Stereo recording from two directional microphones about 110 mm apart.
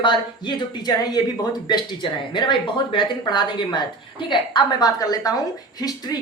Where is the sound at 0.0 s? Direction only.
45° left (ahead or behind).